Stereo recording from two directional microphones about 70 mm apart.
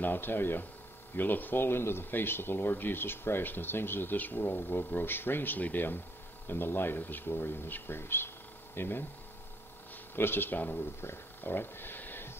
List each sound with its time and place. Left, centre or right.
0.0 s speech: left
10.1 s speech: left